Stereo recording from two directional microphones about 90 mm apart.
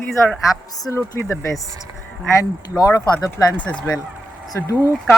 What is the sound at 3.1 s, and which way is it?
Speech, 15° left (ahead or behind).